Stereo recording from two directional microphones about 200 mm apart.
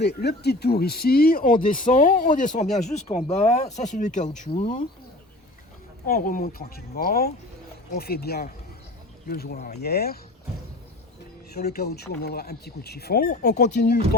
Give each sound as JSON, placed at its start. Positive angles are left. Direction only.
{"t": 0.0, "sound": "speech", "side_deg": 55}
{"t": 6.1, "sound": "speech", "side_deg": 45}
{"t": 11.5, "sound": "speech", "side_deg": 50}